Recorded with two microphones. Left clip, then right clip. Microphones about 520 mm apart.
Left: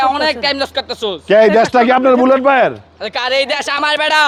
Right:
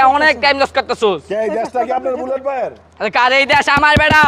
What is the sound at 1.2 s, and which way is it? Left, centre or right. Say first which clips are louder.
Speech: left 9 dB; left.